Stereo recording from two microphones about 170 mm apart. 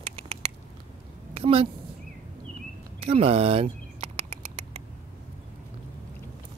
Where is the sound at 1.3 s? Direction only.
35° right (ahead or behind).